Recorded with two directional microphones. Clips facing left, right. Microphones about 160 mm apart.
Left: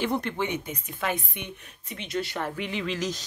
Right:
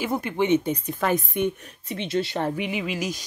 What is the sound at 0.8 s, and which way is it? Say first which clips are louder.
Speech: right 6 dB; 40° right (ahead or behind).